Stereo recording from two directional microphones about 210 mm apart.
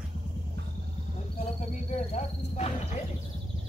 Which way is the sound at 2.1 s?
30° left (ahead or behind).